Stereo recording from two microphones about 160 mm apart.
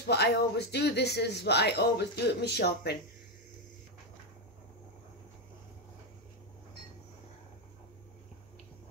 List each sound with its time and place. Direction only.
0.0 s speech: 90° left